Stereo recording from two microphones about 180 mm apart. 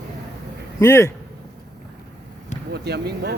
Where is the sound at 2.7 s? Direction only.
65° right (ahead or behind).